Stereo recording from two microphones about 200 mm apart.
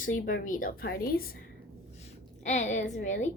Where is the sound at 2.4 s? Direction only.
35° left (ahead or behind).